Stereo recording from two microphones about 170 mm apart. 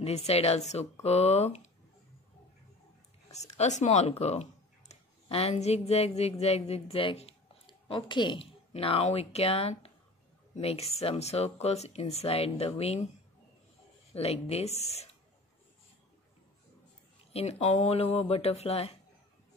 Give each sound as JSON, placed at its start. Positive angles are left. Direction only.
{"t": 0.0, "sound": "speech", "side_deg": 40}
{"t": 3.3, "sound": "speech", "side_deg": 40}
{"t": 14.1, "sound": "speech", "side_deg": 35}
{"t": 17.3, "sound": "speech", "side_deg": 35}